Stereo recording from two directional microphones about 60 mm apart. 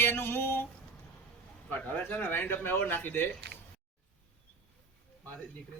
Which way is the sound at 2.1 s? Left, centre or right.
Left.